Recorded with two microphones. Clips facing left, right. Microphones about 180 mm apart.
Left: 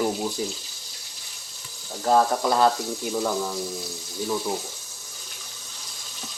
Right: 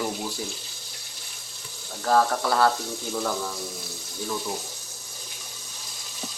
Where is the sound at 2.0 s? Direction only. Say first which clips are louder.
Left 2 dB; 20° left (ahead or behind).